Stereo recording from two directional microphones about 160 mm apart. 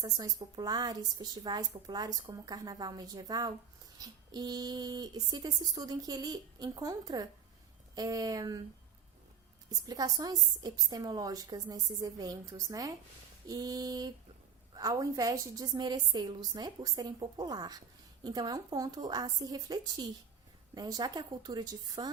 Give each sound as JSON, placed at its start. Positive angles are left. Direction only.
{"t": 0.0, "sound": "a woman's voice", "side_deg": -25}
{"t": 9.6, "sound": "a woman's voice", "side_deg": -25}